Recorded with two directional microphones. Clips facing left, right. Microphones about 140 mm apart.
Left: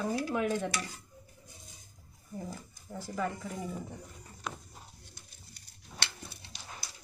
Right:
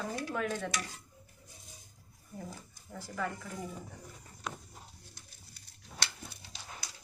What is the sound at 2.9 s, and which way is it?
Speech, 20° left (ahead or behind).